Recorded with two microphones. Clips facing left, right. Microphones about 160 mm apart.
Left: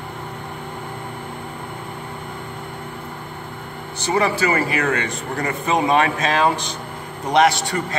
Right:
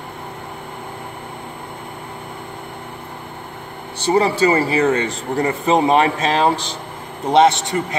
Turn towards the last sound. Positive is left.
turn(degrees=-20)  # may be behind; listen again after turning